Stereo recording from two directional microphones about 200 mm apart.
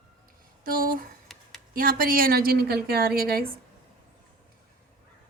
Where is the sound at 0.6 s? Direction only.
45° right (ahead or behind).